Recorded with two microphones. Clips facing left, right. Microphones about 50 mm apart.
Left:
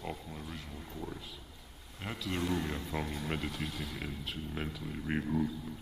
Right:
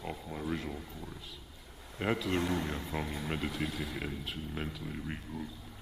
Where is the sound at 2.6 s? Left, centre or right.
Centre.